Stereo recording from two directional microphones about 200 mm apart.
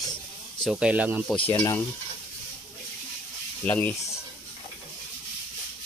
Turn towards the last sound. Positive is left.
turn(degrees=10)  # may be behind; listen again after turning